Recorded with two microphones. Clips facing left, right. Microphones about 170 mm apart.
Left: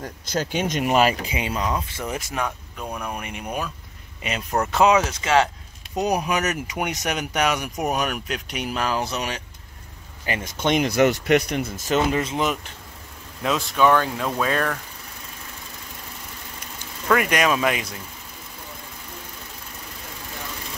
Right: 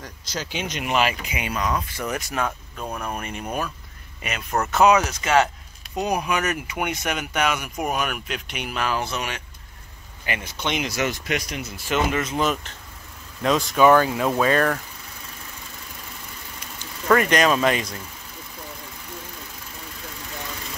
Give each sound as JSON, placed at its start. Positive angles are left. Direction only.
{"t": 0.0, "sound": "speech", "side_deg": 50}
{"t": 2.8, "sound": "speech", "side_deg": -5}
{"t": 3.2, "sound": "speech", "side_deg": 10}
{"t": 4.6, "sound": "speech", "side_deg": 30}
{"t": 6.0, "sound": "speech", "side_deg": 40}
{"t": 10.6, "sound": "speech", "side_deg": 45}
{"t": 12.4, "sound": "speech", "side_deg": 10}
{"t": 13.4, "sound": "speech", "side_deg": 0}
{"t": 17.1, "sound": "speech", "side_deg": 5}